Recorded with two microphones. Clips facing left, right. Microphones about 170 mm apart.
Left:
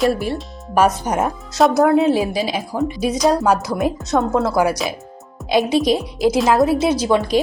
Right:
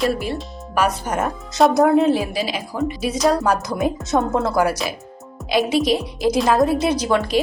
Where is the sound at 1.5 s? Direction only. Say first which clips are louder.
Even; centre (ahead or behind).